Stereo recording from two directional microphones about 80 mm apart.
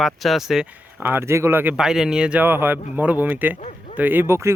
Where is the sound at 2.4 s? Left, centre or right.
Right.